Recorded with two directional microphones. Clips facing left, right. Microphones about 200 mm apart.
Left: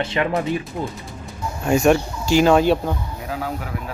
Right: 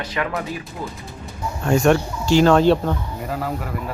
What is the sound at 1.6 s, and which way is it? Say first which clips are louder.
Speech: even; 10° left (ahead or behind).